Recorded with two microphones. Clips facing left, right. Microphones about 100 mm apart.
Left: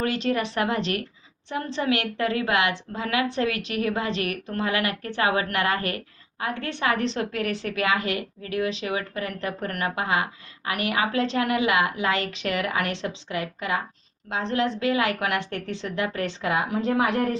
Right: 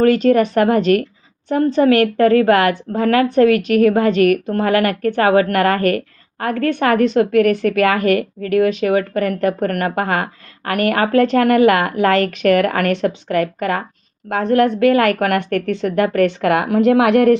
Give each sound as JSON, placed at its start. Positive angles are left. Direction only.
{"t": 0.0, "sound": "a woman's voice", "side_deg": -50}